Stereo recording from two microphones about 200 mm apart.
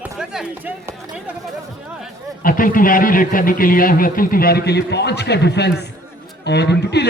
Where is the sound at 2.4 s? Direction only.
45° left (ahead or behind).